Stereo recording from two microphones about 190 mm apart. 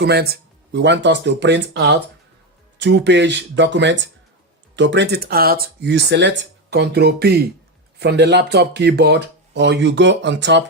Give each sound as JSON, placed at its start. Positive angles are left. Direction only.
{"t": 0.0, "sound": "speech", "side_deg": -55}